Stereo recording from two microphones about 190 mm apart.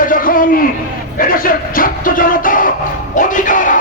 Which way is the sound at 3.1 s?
45° left (ahead or behind).